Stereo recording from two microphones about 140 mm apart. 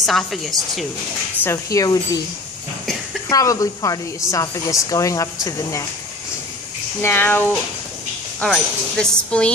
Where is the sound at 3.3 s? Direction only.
25° left (ahead or behind).